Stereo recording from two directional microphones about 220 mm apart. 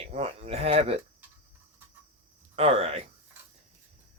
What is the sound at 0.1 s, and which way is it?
Speech, 30° right (ahead or behind).